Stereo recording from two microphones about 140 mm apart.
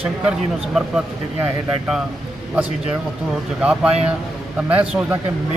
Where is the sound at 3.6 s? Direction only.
5° right (ahead or behind).